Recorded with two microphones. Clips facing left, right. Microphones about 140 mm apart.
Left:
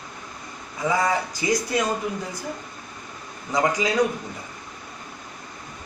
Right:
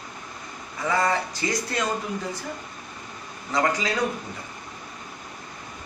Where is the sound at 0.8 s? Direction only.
15° left (ahead or behind).